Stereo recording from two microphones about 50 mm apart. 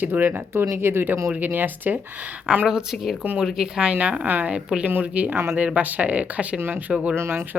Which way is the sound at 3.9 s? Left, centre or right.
Right.